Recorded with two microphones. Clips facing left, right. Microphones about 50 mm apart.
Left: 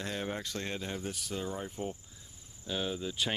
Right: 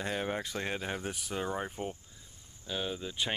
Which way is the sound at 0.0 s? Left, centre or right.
Centre.